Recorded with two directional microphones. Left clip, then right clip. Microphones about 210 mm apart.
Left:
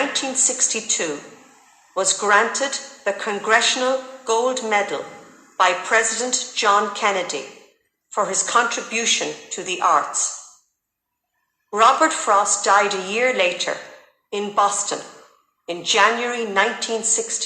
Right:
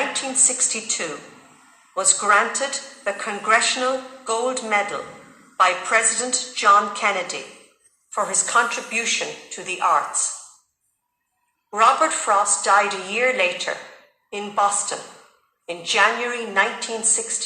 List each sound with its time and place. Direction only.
0.1 s a woman's voice: 15° left (ahead or behind)
11.7 s a woman's voice: 15° left (ahead or behind)